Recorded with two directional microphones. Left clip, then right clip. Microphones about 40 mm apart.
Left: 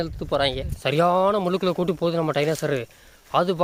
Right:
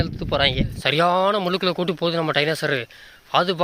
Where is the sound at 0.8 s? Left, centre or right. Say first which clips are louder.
Right 1 dB; left.